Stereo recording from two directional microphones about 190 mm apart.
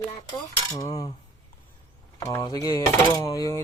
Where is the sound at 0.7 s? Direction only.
20° left (ahead or behind).